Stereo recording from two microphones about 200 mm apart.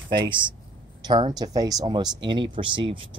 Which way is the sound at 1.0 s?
20° right (ahead or behind).